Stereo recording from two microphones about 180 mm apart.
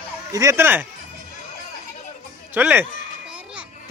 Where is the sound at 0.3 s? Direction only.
20° right (ahead or behind).